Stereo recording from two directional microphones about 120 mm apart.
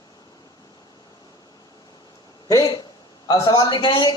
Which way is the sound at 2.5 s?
30° left (ahead or behind).